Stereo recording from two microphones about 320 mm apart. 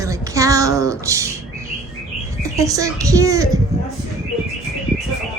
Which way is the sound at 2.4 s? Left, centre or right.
Centre.